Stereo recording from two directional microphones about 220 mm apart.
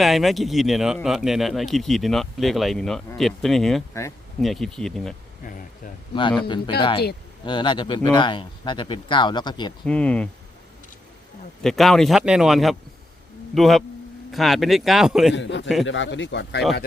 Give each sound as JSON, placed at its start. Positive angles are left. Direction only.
{"t": 0.0, "sound": "speech", "side_deg": 0}
{"t": 6.5, "sound": "speech", "side_deg": 20}
{"t": 9.8, "sound": "speech", "side_deg": 5}
{"t": 11.6, "sound": "speech", "side_deg": 0}
{"t": 15.4, "sound": "a man's voice", "side_deg": 55}